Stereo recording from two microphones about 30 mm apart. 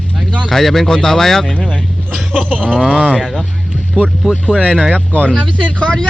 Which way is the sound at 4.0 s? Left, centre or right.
Right.